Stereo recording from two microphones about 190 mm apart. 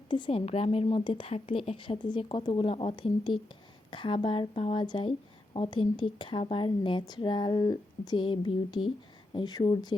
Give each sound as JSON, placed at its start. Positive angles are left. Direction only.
{"t": 0.1, "sound": "speech", "side_deg": 30}